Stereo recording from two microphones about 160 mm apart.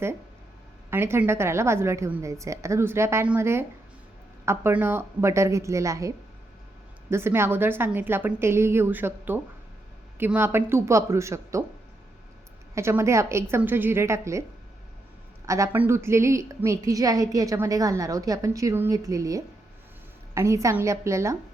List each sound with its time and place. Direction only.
0.9 s a woman's voice: 15° right (ahead or behind)
12.7 s a woman's voice: 15° right (ahead or behind)
15.4 s a woman's voice: 20° right (ahead or behind)